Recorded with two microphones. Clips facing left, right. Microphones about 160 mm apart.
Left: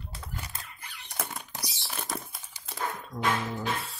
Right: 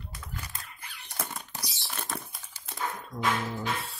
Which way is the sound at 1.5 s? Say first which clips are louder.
Left 1 dB; 15° left (ahead or behind).